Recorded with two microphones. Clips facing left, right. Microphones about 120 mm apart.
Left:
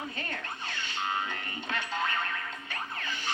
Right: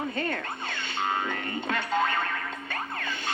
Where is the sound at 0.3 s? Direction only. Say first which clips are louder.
Right 6 dB; 55° right (ahead or behind).